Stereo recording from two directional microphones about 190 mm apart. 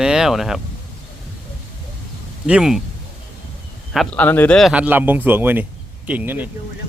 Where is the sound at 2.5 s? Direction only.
5° right (ahead or behind).